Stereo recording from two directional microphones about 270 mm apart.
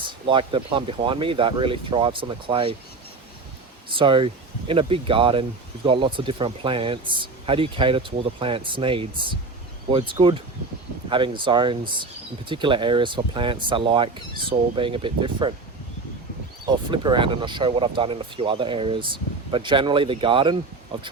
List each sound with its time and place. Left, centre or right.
0.0 s speech: centre
3.9 s speech: centre
16.6 s speech: centre